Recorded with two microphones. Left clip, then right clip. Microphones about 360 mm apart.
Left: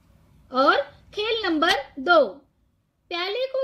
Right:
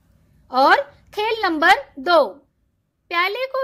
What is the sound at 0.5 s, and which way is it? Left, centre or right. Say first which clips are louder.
Speech: right 5 dB; right.